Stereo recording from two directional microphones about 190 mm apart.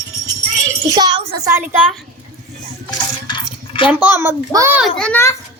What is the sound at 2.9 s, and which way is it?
Stir, 25° left (ahead or behind).